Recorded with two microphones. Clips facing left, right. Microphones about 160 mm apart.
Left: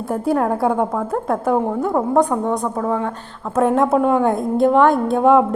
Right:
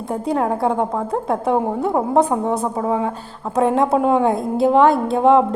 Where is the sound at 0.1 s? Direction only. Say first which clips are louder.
Left 1 dB; centre (ahead or behind).